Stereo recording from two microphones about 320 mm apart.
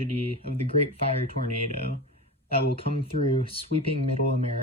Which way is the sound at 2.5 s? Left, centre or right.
Centre.